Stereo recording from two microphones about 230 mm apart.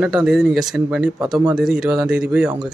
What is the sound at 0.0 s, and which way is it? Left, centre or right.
Speech, centre.